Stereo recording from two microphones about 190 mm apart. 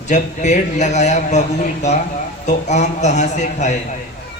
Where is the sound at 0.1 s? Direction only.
40° left (ahead or behind).